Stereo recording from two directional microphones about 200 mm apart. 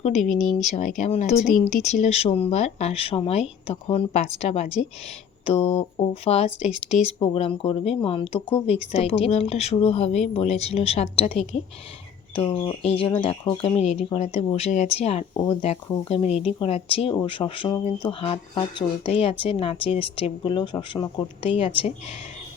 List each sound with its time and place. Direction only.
0.0 s speech: 35° left (ahead or behind)
0.3 s speech: centre (ahead or behind)
0.7 s speech: 35° left (ahead or behind)